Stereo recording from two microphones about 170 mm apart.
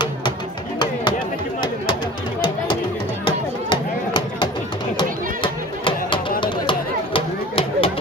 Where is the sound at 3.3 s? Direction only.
30° left (ahead or behind).